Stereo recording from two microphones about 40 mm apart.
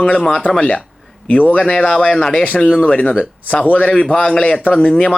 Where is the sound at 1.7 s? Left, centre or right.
Left.